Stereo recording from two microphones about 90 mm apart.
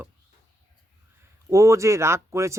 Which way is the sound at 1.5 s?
35° right (ahead or behind).